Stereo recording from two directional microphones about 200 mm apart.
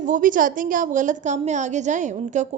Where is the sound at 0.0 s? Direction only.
40° right (ahead or behind).